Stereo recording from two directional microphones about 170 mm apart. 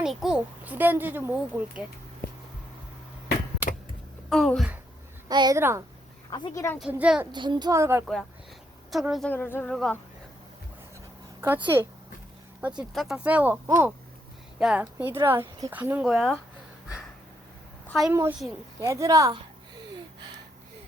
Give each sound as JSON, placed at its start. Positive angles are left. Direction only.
{"t": 0.0, "sound": "speech", "side_deg": -5}
{"t": 4.3, "sound": "speech", "side_deg": 0}
{"t": 5.3, "sound": "speech", "side_deg": -25}
{"t": 6.3, "sound": "speech", "side_deg": 20}
{"t": 6.7, "sound": "speech", "side_deg": -5}
{"t": 7.3, "sound": "speech", "side_deg": -25}
{"t": 8.0, "sound": "speech", "side_deg": 5}
{"t": 9.3, "sound": "speech", "side_deg": 10}
{"t": 9.7, "sound": "speech", "side_deg": 0}
{"t": 11.3, "sound": "speech", "side_deg": -10}
{"t": 12.9, "sound": "speech", "side_deg": 0}
{"t": 17.8, "sound": "a woman's voice", "side_deg": 0}
{"t": 18.1, "sound": "speech", "side_deg": -15}